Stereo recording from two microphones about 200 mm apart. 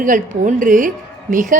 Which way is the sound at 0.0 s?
40° right (ahead or behind).